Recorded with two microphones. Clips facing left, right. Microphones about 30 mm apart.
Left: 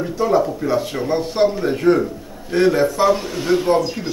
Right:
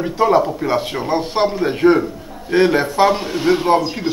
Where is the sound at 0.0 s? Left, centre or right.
Right.